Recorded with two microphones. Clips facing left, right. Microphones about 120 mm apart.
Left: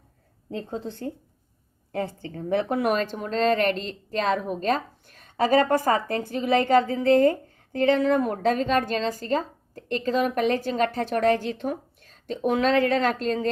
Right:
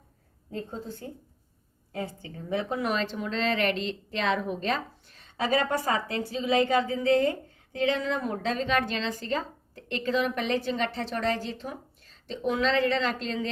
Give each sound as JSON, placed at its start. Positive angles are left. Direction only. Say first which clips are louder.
{"t": 0.5, "sound": "a woman's voice", "louder": "left 4 dB", "side_deg": 85}
{"t": 1.9, "sound": "speech", "louder": "left 5 dB", "side_deg": 55}